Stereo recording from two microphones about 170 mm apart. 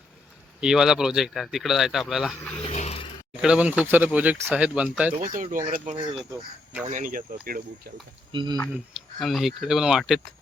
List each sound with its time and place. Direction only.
0.6 s speech: 5° right (ahead or behind)
2.6 s a sound: 35° left (ahead or behind)
3.4 s speech: 5° right (ahead or behind)
5.2 s speech: 50° right (ahead or behind)
8.3 s speech: 30° right (ahead or behind)
8.7 s speech: 5° right (ahead or behind)